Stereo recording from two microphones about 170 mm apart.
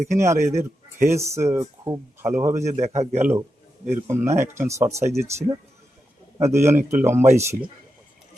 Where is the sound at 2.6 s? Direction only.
40° right (ahead or behind).